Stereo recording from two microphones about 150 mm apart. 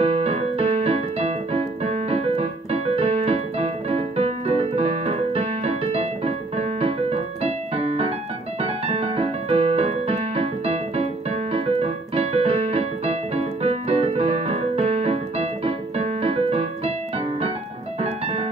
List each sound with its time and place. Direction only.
0.0 s keyboard: 45° right (ahead or behind)
8.5 s music: 45° right (ahead or behind)
11.5 s keyboard: 40° right (ahead or behind)
18.0 s music: 45° right (ahead or behind)